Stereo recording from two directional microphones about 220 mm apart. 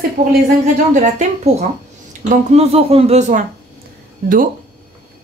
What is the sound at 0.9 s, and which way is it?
Speech, 30° right (ahead or behind).